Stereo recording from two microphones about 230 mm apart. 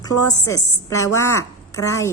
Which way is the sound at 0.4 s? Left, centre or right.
Centre.